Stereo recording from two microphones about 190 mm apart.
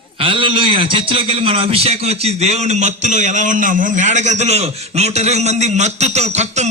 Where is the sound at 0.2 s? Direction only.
25° right (ahead or behind).